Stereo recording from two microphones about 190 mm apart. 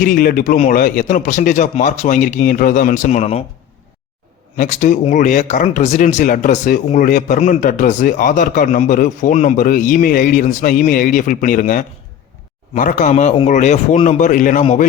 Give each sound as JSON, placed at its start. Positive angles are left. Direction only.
{"t": 0.0, "sound": "speech", "side_deg": 50}
{"t": 4.5, "sound": "speech", "side_deg": 40}